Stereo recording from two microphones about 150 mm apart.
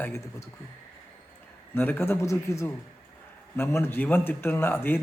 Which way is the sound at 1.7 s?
15° left (ahead or behind).